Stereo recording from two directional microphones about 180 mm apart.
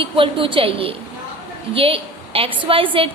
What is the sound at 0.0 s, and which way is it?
A woman's voice, 30° right (ahead or behind).